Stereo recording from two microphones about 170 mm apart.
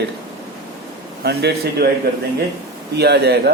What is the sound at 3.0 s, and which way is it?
Speech, 75° right (ahead or behind).